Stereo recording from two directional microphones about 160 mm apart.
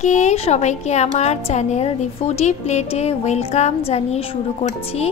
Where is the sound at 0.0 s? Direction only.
45° left (ahead or behind).